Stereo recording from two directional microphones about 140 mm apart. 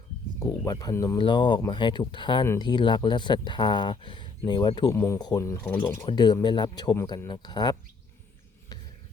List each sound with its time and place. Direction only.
0.3 s speech: 25° left (ahead or behind)
4.9 s speech: 20° left (ahead or behind)
6.9 s speech: 20° left (ahead or behind)
7.3 s speech: 30° left (ahead or behind)
8.7 s stir: 30° left (ahead or behind)